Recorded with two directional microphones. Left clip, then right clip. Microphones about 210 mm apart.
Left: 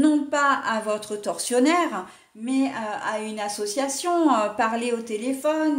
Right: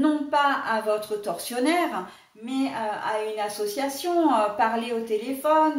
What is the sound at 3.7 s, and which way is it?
A woman's voice, 50° left (ahead or behind).